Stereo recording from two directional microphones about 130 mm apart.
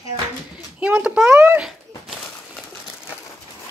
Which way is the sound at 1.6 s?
5° right (ahead or behind).